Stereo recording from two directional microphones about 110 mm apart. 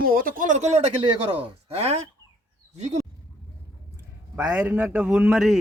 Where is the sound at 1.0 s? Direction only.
65° right (ahead or behind).